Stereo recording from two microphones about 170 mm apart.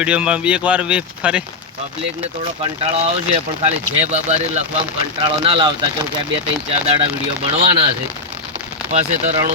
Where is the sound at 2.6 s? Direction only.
40° right (ahead or behind).